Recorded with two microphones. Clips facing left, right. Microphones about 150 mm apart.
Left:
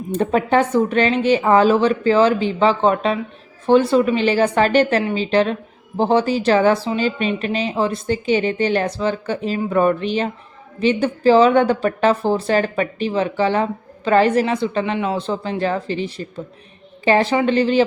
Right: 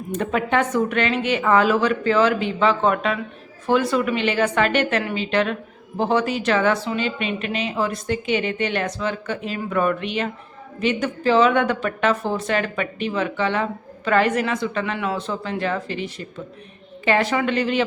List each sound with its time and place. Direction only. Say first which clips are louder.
0.1 s a woman's voice: left 5 dB; 35° left (ahead or behind)